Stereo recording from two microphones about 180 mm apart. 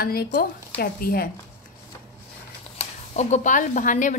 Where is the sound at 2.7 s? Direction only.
40° left (ahead or behind).